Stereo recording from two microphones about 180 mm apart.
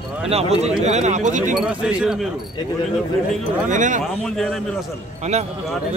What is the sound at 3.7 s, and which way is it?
Speech, 45° right (ahead or behind).